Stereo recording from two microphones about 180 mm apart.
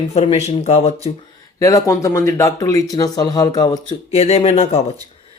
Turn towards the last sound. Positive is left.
turn(degrees=35)  # may be behind; listen again after turning